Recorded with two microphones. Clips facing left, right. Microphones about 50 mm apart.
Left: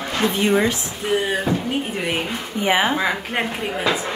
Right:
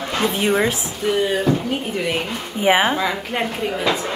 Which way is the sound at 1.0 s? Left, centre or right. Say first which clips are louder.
Right 2 dB; centre.